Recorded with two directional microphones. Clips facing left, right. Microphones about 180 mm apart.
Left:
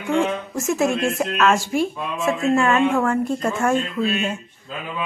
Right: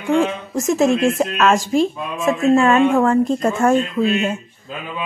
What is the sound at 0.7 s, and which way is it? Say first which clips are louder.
Speech: right 5 dB; 40° right (ahead or behind).